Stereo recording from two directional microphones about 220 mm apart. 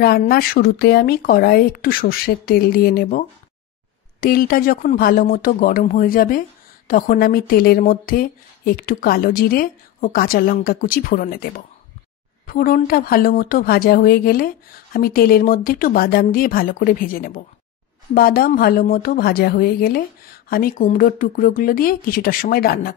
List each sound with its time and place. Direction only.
0.0 s speech: 45° left (ahead or behind)